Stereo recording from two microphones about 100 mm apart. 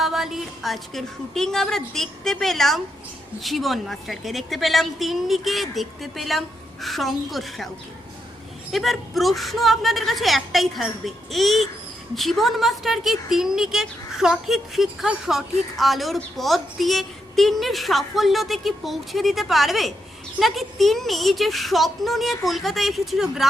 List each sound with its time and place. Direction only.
0.0 s a woman's voice: 5° right (ahead or behind)
8.7 s a woman's voice: centre (ahead or behind)